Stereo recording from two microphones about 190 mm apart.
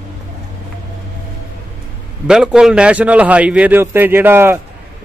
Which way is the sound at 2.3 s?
5° right (ahead or behind).